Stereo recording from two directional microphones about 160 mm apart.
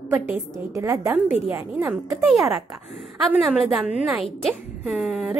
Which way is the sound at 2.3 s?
Centre (ahead or behind).